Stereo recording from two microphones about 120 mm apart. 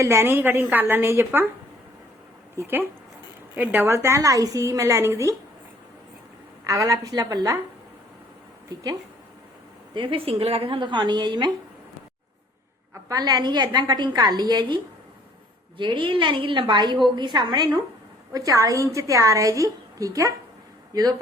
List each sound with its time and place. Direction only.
0.0 s a woman's voice: 20° right (ahead or behind)
2.6 s a woman's voice: 20° right (ahead or behind)
6.7 s a woman's voice: 30° right (ahead or behind)
9.9 s speech: 45° right (ahead or behind)
12.9 s a woman's voice: 30° right (ahead or behind)
15.8 s a woman's voice: 40° right (ahead or behind)
18.3 s a woman's voice: 30° right (ahead or behind)